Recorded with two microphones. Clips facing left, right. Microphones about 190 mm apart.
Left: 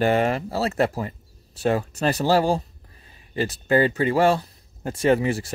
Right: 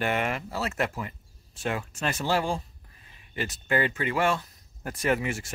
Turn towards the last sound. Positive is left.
turn(degrees=35)  # may be behind; listen again after turning